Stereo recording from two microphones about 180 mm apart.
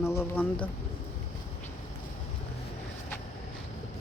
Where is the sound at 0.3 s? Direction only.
5° left (ahead or behind).